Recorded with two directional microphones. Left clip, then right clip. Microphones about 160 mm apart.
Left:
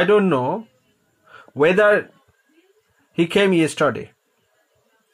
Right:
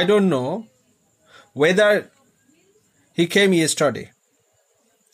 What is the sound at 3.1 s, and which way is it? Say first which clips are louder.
Speech: even; 15° right (ahead or behind).